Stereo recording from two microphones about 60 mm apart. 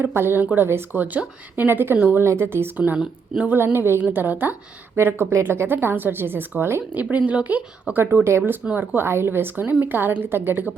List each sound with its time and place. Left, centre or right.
0.0 s a woman's voice: right
1.0 s a woman's voice: right
2.7 s speech: right
3.5 s a woman's voice: right
6.9 s speech: right
8.1 s a woman's voice: right
8.7 s a woman's voice: right
9.0 s a woman's voice: right